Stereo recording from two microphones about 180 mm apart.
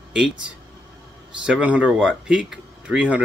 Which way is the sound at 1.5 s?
5° right (ahead or behind).